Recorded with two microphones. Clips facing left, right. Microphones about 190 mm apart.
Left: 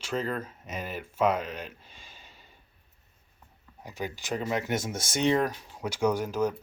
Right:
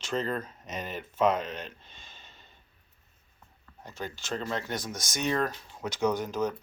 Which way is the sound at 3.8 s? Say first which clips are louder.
Left 2 dB; 15° left (ahead or behind).